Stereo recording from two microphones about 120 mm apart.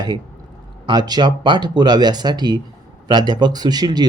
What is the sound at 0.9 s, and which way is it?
Speech, 35° right (ahead or behind).